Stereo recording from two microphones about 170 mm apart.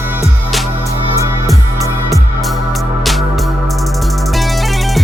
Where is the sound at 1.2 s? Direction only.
20° right (ahead or behind).